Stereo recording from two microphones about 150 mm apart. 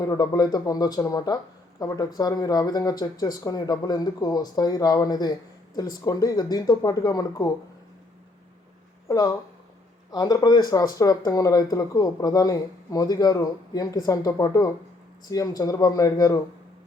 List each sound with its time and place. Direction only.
0.0 s speech: 25° left (ahead or behind)
9.0 s speech: 25° left (ahead or behind)